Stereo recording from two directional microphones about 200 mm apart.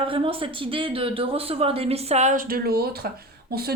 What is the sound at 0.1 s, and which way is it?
Speech, 25° right (ahead or behind).